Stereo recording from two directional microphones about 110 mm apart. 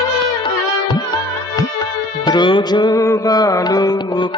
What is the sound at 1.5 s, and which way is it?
Music, 35° left (ahead or behind).